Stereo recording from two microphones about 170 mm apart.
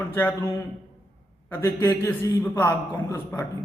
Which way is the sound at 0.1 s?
15° left (ahead or behind).